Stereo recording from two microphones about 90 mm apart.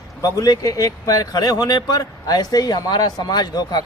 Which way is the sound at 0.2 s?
45° left (ahead or behind).